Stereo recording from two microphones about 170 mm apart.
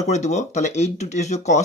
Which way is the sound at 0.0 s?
40° left (ahead or behind).